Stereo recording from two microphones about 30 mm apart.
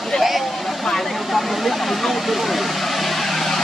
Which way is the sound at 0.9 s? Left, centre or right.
Centre.